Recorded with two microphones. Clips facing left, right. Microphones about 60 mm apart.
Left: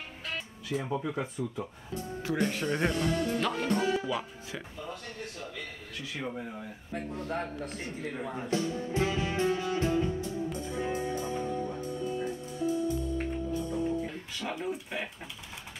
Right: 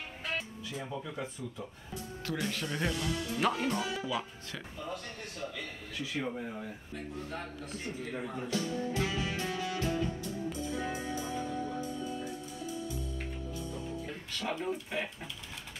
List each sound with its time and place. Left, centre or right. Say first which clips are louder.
0.7 s speech: left 8 dB; left
2.5 s speech: left 5 dB; left
3.3 s music: even; centre
3.6 s a man's voice: left 5 dB; left
6.1 s speech: even; centre
6.9 s a man's voice: left 9 dB; left
8.4 s music: left 3 dB; left
14.0 s music: left 1 dB; centre
14.6 s speech: even; centre